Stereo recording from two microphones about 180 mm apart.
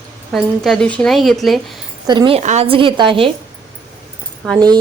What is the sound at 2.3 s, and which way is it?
Speech, 35° right (ahead or behind).